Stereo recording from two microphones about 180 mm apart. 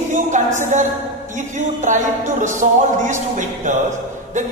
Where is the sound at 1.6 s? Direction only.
45° right (ahead or behind).